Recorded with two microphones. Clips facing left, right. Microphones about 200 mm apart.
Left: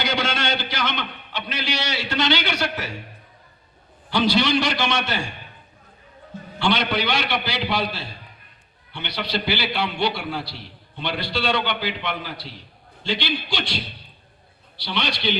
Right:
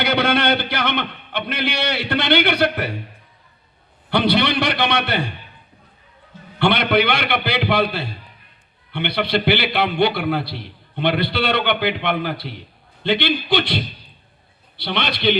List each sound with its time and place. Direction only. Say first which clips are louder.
0.0 s a sound: right 6 dB; 60° right (ahead or behind)
4.1 s a man's voice: right 2 dB; 60° right (ahead or behind)
6.6 s a man's voice: right 5 dB; 60° right (ahead or behind)